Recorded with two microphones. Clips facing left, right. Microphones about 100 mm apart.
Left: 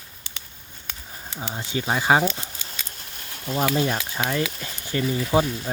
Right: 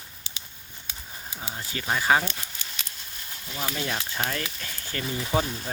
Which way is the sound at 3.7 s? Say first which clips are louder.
Left 6 dB; 40° left (ahead or behind).